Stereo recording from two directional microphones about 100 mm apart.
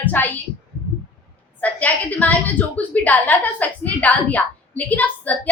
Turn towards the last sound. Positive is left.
turn(degrees=15)  # may be behind; listen again after turning